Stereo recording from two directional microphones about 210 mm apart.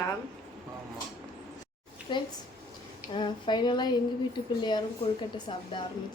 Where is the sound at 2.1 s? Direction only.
20° left (ahead or behind).